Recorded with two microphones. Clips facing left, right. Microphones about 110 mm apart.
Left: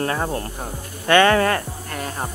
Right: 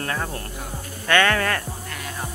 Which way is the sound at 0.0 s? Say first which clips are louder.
Left 5 dB; 25° left (ahead or behind).